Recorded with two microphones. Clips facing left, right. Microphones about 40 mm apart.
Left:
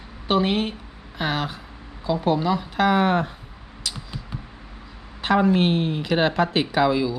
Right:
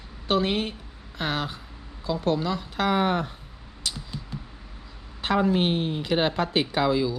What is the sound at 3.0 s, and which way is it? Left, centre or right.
Speech, left.